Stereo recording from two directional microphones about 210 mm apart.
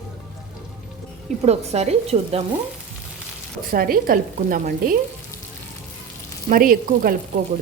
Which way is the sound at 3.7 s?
45° right (ahead or behind).